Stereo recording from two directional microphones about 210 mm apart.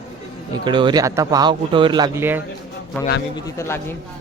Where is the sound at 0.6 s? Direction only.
20° right (ahead or behind).